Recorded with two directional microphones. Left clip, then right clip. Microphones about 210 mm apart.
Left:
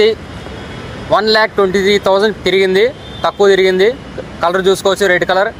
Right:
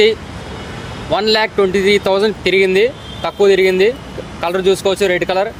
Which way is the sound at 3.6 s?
15° right (ahead or behind).